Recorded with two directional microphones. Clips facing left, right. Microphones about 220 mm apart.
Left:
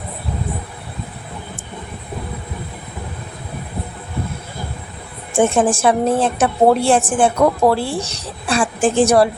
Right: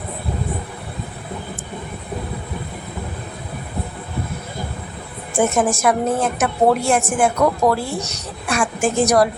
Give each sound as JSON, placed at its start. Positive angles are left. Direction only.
{"t": 5.4, "sound": "a woman's voice", "side_deg": 30}